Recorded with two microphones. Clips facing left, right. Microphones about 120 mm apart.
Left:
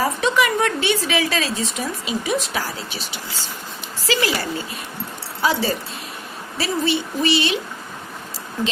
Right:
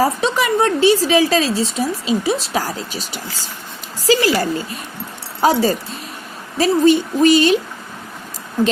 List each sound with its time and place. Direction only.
0.0 s a woman's voice: 35° right (ahead or behind)